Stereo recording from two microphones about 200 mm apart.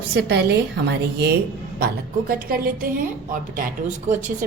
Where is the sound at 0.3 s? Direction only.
55° right (ahead or behind).